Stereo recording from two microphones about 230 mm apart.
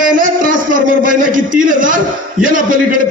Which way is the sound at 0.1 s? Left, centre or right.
Right.